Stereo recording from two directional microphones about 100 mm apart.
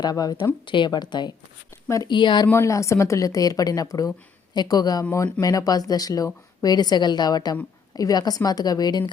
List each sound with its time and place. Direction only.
0.0 s speech: 40° left (ahead or behind)
2.5 s speech: 30° left (ahead or behind)